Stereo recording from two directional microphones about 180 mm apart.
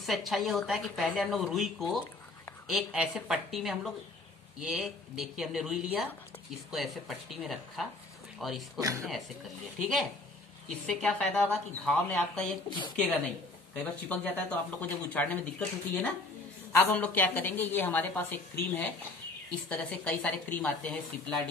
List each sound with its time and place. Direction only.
0.0 s a woman's voice: centre (ahead or behind)
8.7 s speech: 15° right (ahead or behind)
9.8 s a woman's voice: centre (ahead or behind)
12.6 s a woman's voice: 25° left (ahead or behind)
12.9 s a woman's voice: 5° left (ahead or behind)
16.9 s a woman's voice: 10° left (ahead or behind)